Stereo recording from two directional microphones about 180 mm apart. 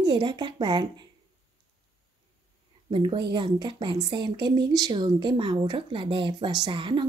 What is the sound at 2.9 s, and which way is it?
Speech, 25° right (ahead or behind).